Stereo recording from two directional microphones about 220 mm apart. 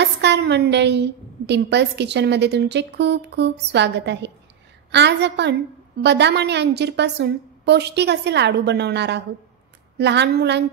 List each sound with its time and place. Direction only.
0.0 s a woman's voice: 50° right (ahead or behind)